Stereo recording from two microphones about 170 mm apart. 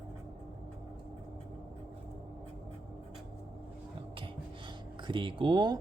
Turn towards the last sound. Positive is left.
turn(degrees=-25)  # may be behind; listen again after turning